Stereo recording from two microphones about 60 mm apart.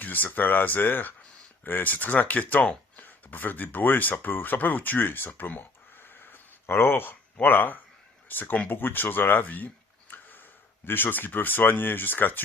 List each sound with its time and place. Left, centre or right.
0.0 s speech: left
10.1 s tick-tock: left
10.8 s speech: left